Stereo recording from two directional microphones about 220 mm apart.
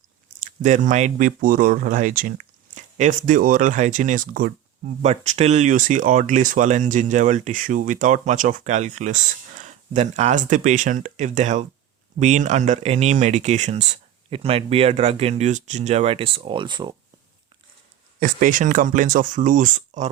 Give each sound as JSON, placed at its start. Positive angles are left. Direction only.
{"t": 0.3, "sound": "speech", "side_deg": -35}
{"t": 18.2, "sound": "speech", "side_deg": -40}